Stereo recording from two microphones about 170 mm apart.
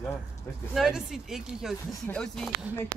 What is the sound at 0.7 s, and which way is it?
Speech, centre (ahead or behind).